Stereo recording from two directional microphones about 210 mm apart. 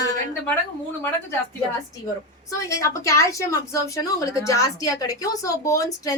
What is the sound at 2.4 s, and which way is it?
A woman's voice, 15° left (ahead or behind).